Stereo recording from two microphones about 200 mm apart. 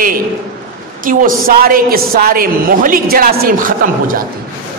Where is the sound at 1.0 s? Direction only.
45° right (ahead or behind).